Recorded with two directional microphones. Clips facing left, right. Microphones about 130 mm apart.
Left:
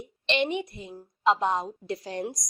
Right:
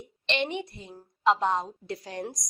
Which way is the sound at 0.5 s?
20° left (ahead or behind).